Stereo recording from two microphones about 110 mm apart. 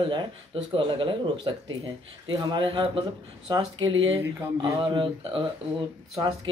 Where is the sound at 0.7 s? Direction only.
45° right (ahead or behind).